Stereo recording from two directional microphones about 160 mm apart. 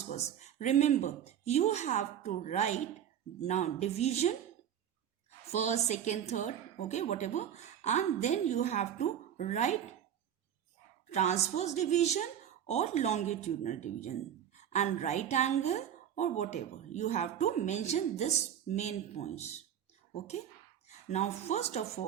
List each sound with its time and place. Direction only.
0.1 s a woman's voice: 45° left (ahead or behind)
5.5 s a woman's voice: 45° left (ahead or behind)
11.1 s a woman's voice: 45° left (ahead or behind)
21.1 s a woman's voice: 45° left (ahead or behind)